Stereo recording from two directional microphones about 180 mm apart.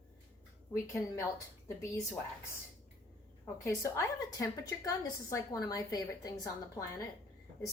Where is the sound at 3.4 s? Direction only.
15° left (ahead or behind).